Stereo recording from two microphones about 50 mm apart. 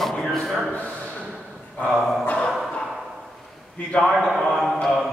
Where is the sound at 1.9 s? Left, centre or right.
Centre.